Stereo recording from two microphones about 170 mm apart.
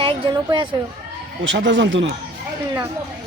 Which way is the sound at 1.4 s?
90° right.